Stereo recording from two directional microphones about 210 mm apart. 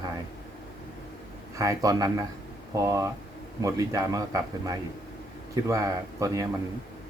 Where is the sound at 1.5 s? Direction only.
15° right (ahead or behind).